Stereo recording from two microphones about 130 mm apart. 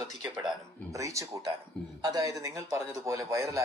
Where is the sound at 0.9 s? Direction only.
25° right (ahead or behind).